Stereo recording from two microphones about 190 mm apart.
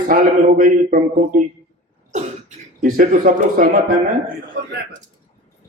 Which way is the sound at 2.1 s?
40° right (ahead or behind).